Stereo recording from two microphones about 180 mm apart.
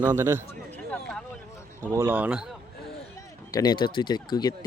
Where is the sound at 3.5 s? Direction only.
20° left (ahead or behind).